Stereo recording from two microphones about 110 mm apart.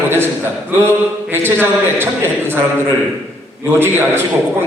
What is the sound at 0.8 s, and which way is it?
A man's voice, 20° right (ahead or behind).